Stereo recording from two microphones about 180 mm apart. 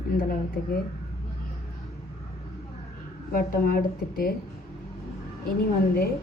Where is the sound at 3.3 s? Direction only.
55° left (ahead or behind).